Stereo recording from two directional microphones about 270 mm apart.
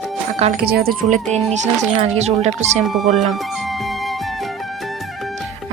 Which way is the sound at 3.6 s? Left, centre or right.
Centre.